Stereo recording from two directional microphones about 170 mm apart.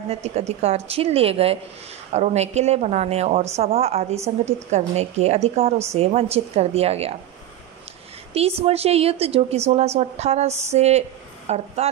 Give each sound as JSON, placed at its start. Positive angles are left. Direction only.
{"t": 0.1, "sound": "a woman's voice", "side_deg": -40}
{"t": 8.4, "sound": "a woman's voice", "side_deg": -35}